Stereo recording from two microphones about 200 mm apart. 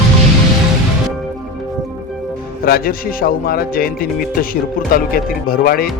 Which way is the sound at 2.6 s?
50° left (ahead or behind).